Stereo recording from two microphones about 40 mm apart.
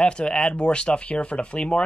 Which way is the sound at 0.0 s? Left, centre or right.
Left.